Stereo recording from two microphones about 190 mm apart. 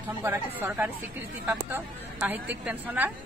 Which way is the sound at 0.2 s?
10° right (ahead or behind).